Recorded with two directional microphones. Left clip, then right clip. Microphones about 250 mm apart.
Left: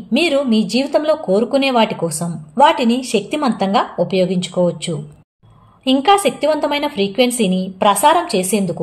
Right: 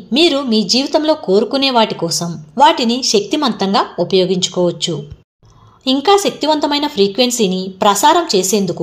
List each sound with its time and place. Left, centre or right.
0.1 s speech: right